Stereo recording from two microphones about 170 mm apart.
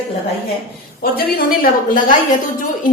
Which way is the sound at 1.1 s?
60° left (ahead or behind).